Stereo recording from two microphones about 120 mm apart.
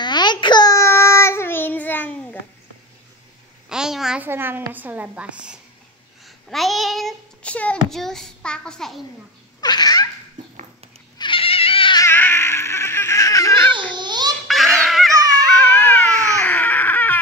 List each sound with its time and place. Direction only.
0.0 s child singing: 40° left (ahead or behind); by 2.1 s 15° left (ahead or behind)
3.6 s a sound: 5° right (ahead or behind)
4.2 s a woman's voice: 15° right (ahead or behind)
6.2 s a child's voice: centre (ahead or behind)
9.6 s baby laughter: 35° left (ahead or behind)
11.1 s cat: 45° left (ahead or behind)
12.0 s baby cry: 20° left (ahead or behind)
13.9 s babbling: 40° right (ahead or behind)
14.5 s fowl: centre (ahead or behind)
15.4 s baby cry: 10° left (ahead or behind)